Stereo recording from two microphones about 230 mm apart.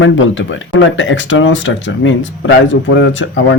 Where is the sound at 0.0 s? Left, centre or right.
Left.